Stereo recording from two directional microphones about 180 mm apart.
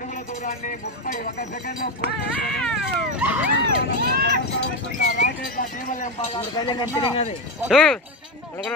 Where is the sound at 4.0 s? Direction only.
60° right (ahead or behind).